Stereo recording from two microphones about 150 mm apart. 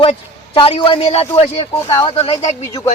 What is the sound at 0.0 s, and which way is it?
A man's voice, 35° left (ahead or behind).